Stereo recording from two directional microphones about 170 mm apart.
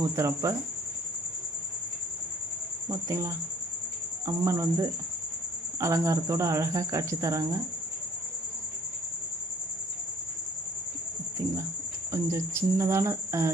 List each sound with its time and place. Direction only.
0.0 s speech: 20° right (ahead or behind)
2.9 s speech: 15° right (ahead or behind)
12.1 s speech: 15° right (ahead or behind)